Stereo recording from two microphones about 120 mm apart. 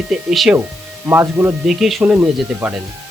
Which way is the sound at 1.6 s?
5° right (ahead or behind).